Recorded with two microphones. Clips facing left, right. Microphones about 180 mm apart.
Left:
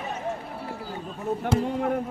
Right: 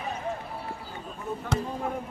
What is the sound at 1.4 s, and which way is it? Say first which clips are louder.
Speech: left 6 dB; 70° left (ahead or behind).